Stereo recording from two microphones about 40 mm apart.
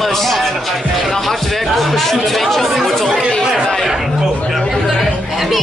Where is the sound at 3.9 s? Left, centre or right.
Centre.